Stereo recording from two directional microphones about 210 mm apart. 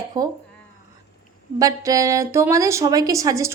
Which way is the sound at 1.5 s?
15° right (ahead or behind).